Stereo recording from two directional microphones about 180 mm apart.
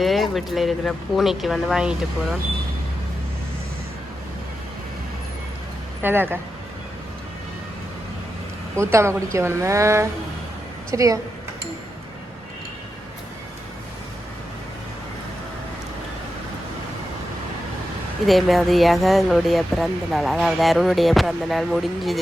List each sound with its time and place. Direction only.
0.0 s speech: centre (ahead or behind)
6.0 s a woman's voice: 10° right (ahead or behind)
8.7 s a woman's voice: 15° right (ahead or behind)
18.3 s speech: centre (ahead or behind)